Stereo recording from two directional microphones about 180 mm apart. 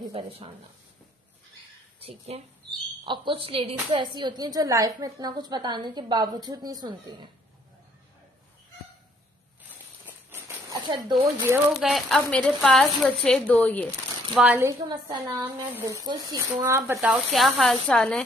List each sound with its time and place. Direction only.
2.0 s a woman's voice: 35° right (ahead or behind)
10.0 s a sound: 10° right (ahead or behind)
10.9 s a woman's voice: 25° right (ahead or behind)
11.7 s a woman's voice: centre (ahead or behind)
14.4 s speech: 10° right (ahead or behind)
17.0 s a woman's voice: centre (ahead or behind)